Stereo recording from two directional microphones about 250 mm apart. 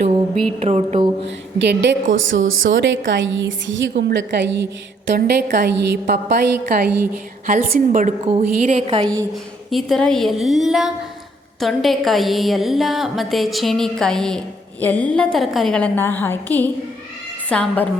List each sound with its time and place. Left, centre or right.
0.6 s a woman's voice: right
1.5 s a woman's voice: right; by 9.2 s centre
9.3 s a woman's voice: centre